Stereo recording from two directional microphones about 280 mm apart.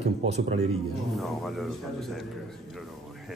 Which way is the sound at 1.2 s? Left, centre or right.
Centre.